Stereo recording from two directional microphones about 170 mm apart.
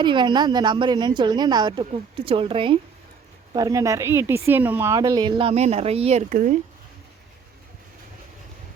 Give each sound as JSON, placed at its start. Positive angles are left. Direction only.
{"t": 0.0, "sound": "a woman's voice", "side_deg": -25}
{"t": 6.3, "sound": "speech", "side_deg": -50}